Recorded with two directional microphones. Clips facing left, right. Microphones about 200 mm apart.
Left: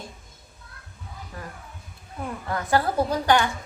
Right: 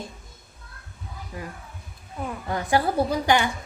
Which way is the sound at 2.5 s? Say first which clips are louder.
Even; 15° right (ahead or behind).